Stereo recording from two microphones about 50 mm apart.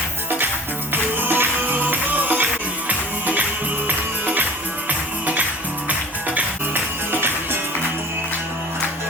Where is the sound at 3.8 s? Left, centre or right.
Right.